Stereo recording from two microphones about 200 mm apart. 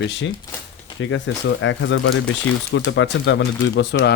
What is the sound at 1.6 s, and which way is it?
Speech, 70° left (ahead or behind).